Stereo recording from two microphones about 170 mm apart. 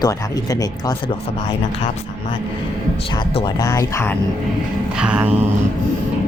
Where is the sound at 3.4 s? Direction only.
20° left (ahead or behind).